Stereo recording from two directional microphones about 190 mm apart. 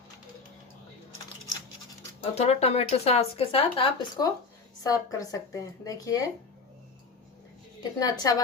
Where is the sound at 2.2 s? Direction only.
35° left (ahead or behind); by 6.3 s 20° left (ahead or behind).